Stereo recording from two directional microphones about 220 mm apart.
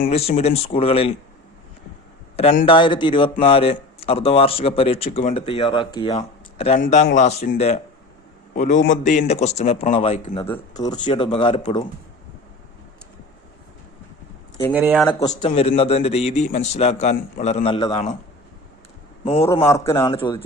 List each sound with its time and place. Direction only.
0.0 s speech: 30° left (ahead or behind)
2.3 s a man's voice: 25° left (ahead or behind)
14.7 s speech: 5° right (ahead or behind)
15.4 s speech: 25° left (ahead or behind)
19.2 s speech: 25° left (ahead or behind)
19.6 s a man's voice: 10° left (ahead or behind)